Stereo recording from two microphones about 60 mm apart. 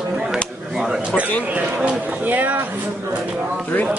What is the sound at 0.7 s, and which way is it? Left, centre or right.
Speech, centre.